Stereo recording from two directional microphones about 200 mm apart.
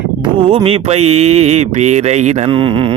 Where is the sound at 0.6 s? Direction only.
30° right (ahead or behind).